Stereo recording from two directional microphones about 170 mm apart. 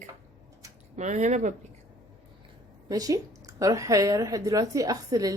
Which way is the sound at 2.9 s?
20° right (ahead or behind).